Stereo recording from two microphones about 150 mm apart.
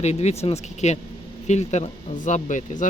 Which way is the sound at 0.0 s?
45° left (ahead or behind).